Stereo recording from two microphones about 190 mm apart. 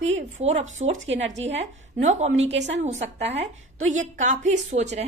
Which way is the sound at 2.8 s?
35° right (ahead or behind).